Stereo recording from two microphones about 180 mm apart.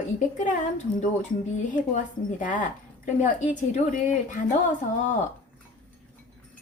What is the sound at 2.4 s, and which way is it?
Speech, 45° left (ahead or behind).